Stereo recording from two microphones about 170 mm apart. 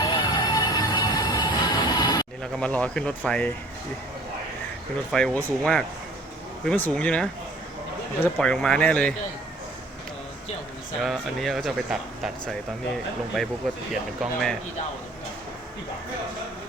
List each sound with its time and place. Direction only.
0.0 s train: 25° left (ahead or behind)
2.4 s speech: 5° left (ahead or behind)
5.1 s speech: 5° left (ahead or behind)
11.0 s speech: centre (ahead or behind)